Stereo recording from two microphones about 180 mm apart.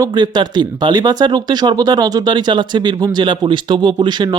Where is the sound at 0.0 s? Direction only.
25° right (ahead or behind).